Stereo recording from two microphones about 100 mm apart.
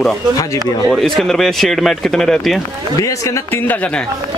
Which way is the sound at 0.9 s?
5° left (ahead or behind).